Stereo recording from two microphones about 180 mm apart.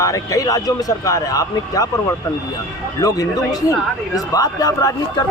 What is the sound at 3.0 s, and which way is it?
A man's voice, 20° left (ahead or behind).